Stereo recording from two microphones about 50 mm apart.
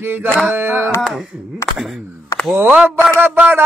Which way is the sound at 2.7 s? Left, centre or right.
Centre.